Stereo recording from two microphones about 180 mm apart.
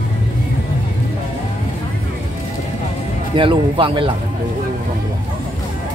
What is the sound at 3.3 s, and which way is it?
Speech, 30° right (ahead or behind).